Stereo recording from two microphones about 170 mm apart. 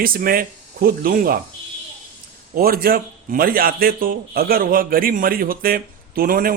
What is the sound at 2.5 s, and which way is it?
A man's voice, 60° right (ahead or behind).